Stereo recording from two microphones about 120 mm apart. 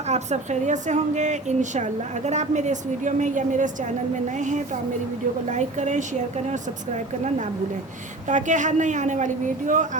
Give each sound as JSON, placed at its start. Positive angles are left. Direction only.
{"t": 0.1, "sound": "a woman's voice", "side_deg": -75}
{"t": 5.5, "sound": "a woman's voice", "side_deg": -75}
{"t": 8.3, "sound": "speech", "side_deg": -90}